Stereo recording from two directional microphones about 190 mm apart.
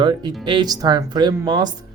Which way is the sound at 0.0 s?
25° right (ahead or behind).